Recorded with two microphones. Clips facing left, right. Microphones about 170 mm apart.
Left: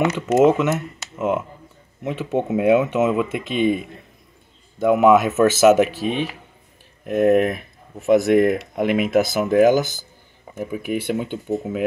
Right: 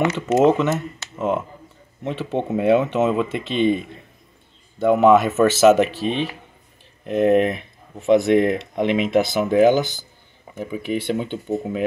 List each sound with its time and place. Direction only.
0.0 s speech: 5° left (ahead or behind)